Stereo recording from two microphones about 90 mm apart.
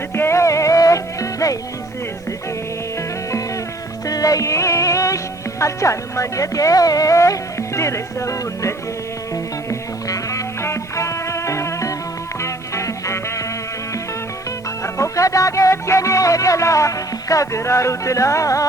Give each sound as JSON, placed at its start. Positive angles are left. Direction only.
{"t": 0.1, "sound": "music", "side_deg": 30}
{"t": 4.0, "sound": "music", "side_deg": 40}
{"t": 14.9, "sound": "music", "side_deg": 35}